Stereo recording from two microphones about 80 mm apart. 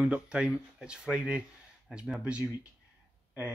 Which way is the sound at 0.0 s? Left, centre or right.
Centre.